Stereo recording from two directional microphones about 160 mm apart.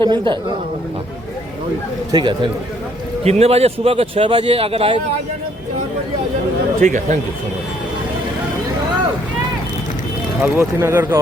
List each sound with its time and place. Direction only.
0.0 s a man's voice: 30° right (ahead or behind)
2.1 s a man's voice: 30° right (ahead or behind)
3.2 s a man's voice: 40° right (ahead or behind)
6.8 s speech: 55° right (ahead or behind)
10.4 s speech: 15° right (ahead or behind)